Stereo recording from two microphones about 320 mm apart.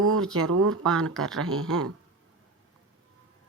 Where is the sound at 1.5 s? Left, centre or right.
Right.